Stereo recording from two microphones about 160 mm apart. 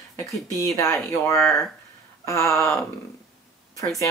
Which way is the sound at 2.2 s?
20° left (ahead or behind).